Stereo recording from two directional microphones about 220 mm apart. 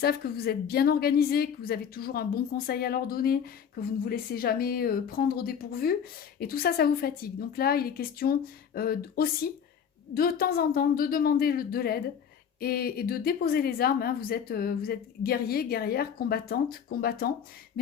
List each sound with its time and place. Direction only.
0.0 s a woman's voice: 45° left (ahead or behind)